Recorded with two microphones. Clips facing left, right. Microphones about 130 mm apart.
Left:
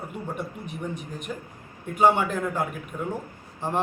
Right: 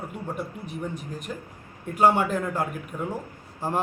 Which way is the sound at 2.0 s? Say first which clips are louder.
Even; centre (ahead or behind).